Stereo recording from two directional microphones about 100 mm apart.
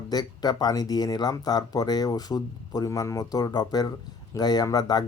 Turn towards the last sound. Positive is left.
turn(degrees=45)  # may be behind; listen again after turning